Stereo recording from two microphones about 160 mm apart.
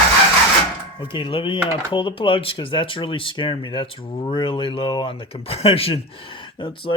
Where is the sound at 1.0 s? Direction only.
30° left (ahead or behind).